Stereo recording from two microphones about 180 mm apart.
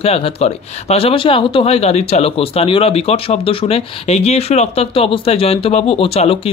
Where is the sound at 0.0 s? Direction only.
35° left (ahead or behind).